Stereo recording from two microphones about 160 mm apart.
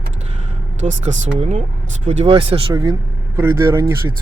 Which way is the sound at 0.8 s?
50° right (ahead or behind).